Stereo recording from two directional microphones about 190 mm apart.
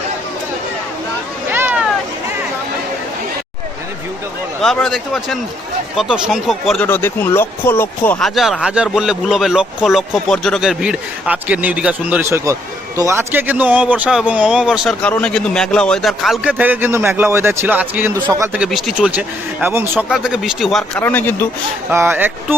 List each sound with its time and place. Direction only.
1.5 s vehicle: 10° right (ahead or behind)
4.6 s speech: centre (ahead or behind)
6.8 s speech: 10° left (ahead or behind); by 18.6 s 15° right (ahead or behind)
18.6 s speech: centre (ahead or behind)
21.8 s speech: 10° right (ahead or behind)